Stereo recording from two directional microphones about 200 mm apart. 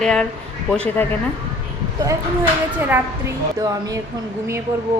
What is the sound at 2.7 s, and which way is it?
Speech, 10° right (ahead or behind).